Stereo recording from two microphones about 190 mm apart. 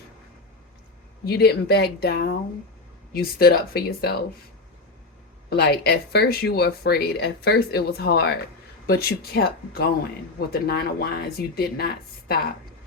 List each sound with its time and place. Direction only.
1.2 s speech: 60° left (ahead or behind)
5.5 s speech: 60° left (ahead or behind)